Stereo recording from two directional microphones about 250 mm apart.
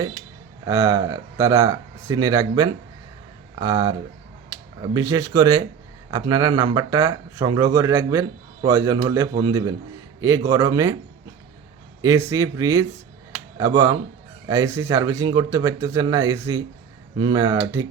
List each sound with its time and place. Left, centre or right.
0.6 s speech: centre
12.0 s a man's voice: centre